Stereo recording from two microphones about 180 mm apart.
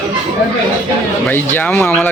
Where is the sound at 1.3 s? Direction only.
10° left (ahead or behind).